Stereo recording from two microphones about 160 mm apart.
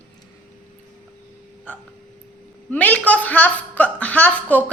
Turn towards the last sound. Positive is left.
turn(degrees=10)  # may be behind; listen again after turning